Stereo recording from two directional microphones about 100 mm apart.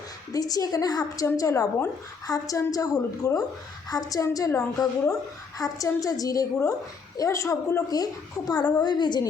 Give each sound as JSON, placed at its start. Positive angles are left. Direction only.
{"t": 0.3, "sound": "a woman's voice", "side_deg": 40}